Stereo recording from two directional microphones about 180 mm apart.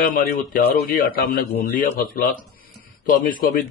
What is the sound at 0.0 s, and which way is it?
A man's voice, 50° left (ahead or behind).